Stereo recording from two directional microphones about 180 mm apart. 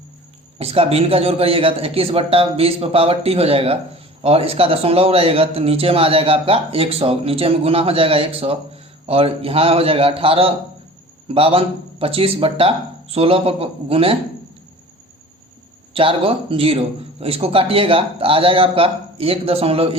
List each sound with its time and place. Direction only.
0.6 s a man's voice: 35° right (ahead or behind)
15.9 s a man's voice: 30° right (ahead or behind)